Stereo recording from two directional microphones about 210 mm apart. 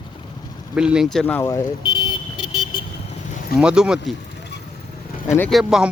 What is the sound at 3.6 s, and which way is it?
Speech, 5° right (ahead or behind).